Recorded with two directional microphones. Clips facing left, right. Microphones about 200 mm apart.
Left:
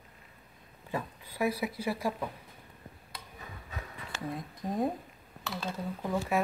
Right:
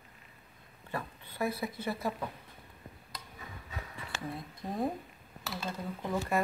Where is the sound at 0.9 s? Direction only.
15° left (ahead or behind).